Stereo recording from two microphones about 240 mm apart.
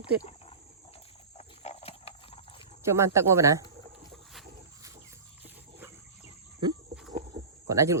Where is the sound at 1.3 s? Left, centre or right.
Left.